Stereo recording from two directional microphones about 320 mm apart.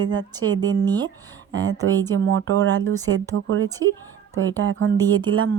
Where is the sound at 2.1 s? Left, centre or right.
Right.